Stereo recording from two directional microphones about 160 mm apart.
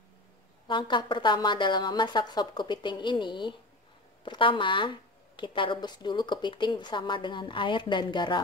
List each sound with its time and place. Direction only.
0.7 s a woman's voice: 30° left (ahead or behind)